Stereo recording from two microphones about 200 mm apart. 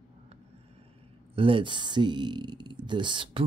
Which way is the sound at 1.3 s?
25° right (ahead or behind).